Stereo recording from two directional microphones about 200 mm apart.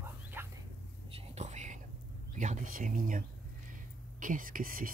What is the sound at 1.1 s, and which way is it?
Whispering, 30° right (ahead or behind).